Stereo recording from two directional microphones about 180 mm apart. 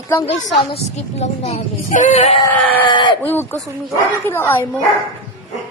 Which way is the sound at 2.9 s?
25° left (ahead or behind).